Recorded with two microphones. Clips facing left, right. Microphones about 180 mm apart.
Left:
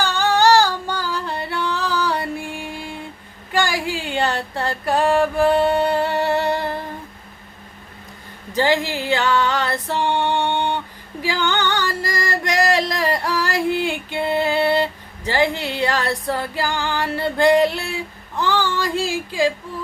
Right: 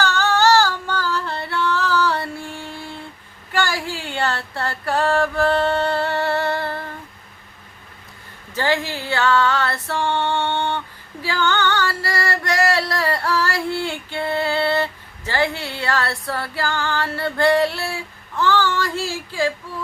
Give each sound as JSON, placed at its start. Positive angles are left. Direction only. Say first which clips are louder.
{"t": 0.0, "sound": "singing", "louder": "left 1 dB", "side_deg": 15}
{"t": 3.5, "sound": "a sound", "louder": "left 2 dB", "side_deg": 15}
{"t": 8.5, "sound": "female singing", "louder": "left 3 dB", "side_deg": 15}